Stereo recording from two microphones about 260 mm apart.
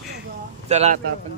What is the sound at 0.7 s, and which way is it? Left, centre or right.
Speech, right.